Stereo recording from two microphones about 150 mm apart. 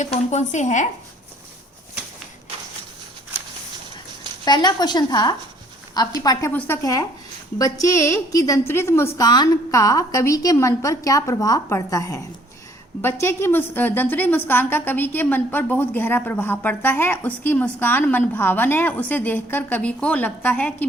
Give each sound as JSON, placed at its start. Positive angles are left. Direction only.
{"t": 0.0, "sound": "a woman's voice", "side_deg": 50}
{"t": 4.4, "sound": "a woman's voice", "side_deg": 30}
{"t": 6.5, "sound": "a woman's voice", "side_deg": 10}
{"t": 6.8, "sound": "a woman's voice", "side_deg": 25}
{"t": 9.1, "sound": "a woman's voice", "side_deg": 25}